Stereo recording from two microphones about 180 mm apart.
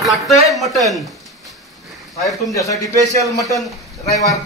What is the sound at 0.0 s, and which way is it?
Speech, centre (ahead or behind).